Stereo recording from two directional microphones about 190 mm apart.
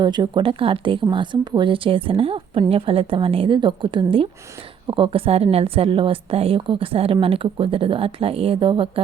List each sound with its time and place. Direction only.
0.0 s a woman's voice: 25° right (ahead or behind)